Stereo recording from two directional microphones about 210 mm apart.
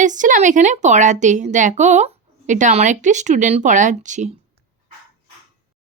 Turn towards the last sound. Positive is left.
turn(degrees=-35)  # may be behind; listen again after turning